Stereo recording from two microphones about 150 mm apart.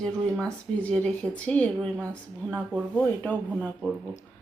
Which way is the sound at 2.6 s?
10° right (ahead or behind).